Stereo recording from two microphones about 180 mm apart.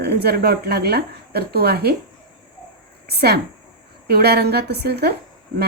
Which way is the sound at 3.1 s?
60° right (ahead or behind).